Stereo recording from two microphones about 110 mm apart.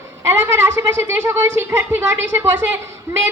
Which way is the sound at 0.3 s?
25° right (ahead or behind).